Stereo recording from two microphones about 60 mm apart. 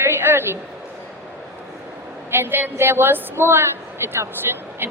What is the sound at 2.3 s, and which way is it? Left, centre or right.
A woman's voice, right.